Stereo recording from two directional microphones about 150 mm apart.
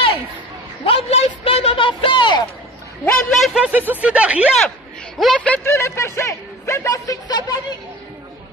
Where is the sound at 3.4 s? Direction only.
5° right (ahead or behind).